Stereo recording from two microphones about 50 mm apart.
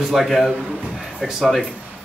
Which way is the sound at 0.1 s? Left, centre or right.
Centre.